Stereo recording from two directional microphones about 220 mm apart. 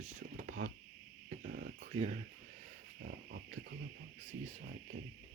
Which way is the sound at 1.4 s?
40° right (ahead or behind).